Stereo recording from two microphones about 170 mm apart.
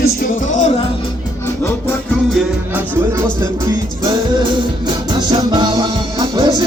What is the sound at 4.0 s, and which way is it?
Music, 25° right (ahead or behind).